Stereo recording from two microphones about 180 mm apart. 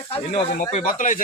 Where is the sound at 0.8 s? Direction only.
45° left (ahead or behind).